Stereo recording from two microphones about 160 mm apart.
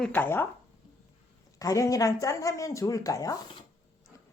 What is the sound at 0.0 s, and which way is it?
Speech, 10° left (ahead or behind).